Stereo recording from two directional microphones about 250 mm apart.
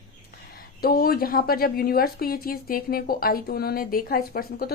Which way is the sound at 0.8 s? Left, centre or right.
Left.